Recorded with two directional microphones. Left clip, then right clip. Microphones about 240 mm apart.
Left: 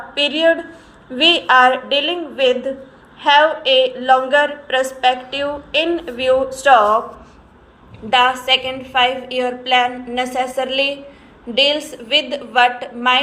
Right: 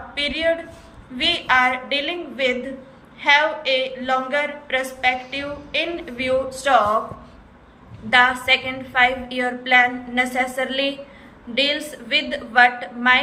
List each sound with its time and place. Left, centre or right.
0.1 s a woman's voice: centre
8.1 s a woman's voice: left